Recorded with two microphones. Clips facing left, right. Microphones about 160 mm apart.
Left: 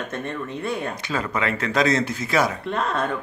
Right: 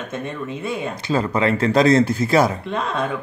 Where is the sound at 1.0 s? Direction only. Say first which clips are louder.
Right 6 dB; 30° right (ahead or behind).